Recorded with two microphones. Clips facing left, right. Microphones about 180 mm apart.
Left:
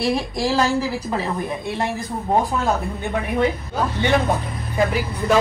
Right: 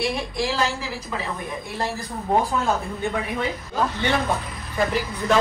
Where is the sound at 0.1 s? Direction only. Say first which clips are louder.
Left 5 dB; 40° left (ahead or behind).